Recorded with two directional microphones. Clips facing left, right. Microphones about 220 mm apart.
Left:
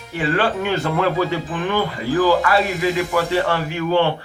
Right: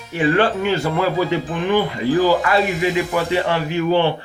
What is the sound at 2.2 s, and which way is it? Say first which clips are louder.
Speech: left 1 dB; 20° right (ahead or behind).